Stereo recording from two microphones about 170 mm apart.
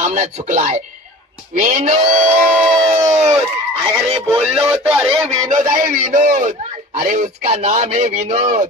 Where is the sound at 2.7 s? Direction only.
20° right (ahead or behind).